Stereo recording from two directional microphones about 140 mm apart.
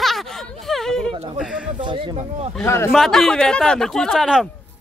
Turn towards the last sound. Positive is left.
turn(degrees=0)  # may be behind; listen again after turning